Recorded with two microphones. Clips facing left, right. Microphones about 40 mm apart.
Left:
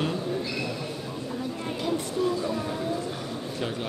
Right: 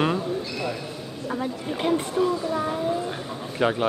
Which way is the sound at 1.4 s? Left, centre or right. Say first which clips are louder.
Right 4 dB; right.